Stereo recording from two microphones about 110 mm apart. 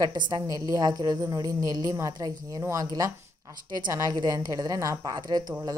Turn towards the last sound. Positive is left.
turn(degrees=-35)  # may be behind; listen again after turning